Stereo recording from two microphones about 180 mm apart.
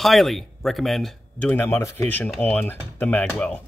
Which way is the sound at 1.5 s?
15° left (ahead or behind).